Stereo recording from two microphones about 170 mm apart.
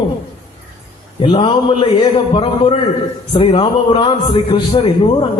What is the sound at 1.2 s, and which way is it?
A man's voice, 30° left (ahead or behind).